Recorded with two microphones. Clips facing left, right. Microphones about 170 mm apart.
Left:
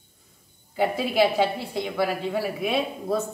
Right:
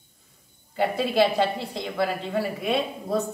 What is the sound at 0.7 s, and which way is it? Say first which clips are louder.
Speech: even; 5° left (ahead or behind).